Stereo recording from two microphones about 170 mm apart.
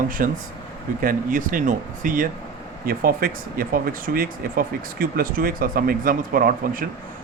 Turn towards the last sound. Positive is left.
turn(degrees=-55)  # may be behind; listen again after turning